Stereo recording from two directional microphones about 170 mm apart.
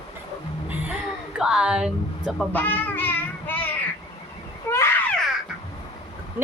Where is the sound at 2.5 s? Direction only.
10° left (ahead or behind).